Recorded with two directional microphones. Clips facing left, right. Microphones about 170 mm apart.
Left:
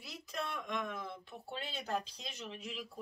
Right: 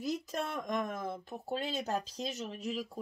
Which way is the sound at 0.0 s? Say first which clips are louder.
Right 8 dB; 40° right (ahead or behind).